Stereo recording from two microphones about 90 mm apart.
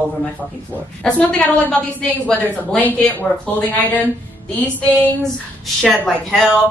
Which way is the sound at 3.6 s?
20° left (ahead or behind).